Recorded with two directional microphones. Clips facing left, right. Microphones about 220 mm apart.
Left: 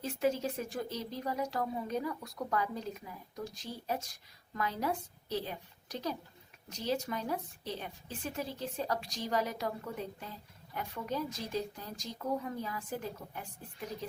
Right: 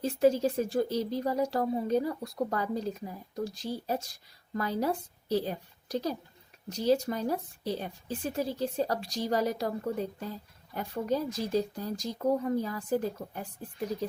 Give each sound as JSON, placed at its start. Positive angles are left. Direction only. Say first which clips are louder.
{"t": 0.0, "sound": "speech", "louder": "right 7 dB", "side_deg": -35}